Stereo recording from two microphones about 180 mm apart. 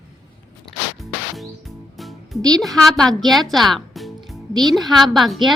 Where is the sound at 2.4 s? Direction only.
20° right (ahead or behind).